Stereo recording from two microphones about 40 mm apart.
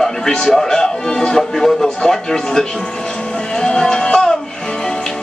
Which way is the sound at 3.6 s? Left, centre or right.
Centre.